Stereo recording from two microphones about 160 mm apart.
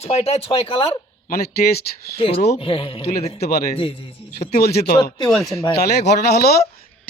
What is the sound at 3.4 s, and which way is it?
Speech, 70° left (ahead or behind).